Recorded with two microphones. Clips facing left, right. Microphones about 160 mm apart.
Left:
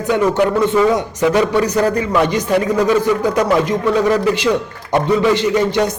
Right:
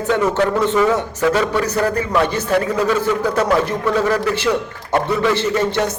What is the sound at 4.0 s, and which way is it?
A man's voice, 15° left (ahead or behind).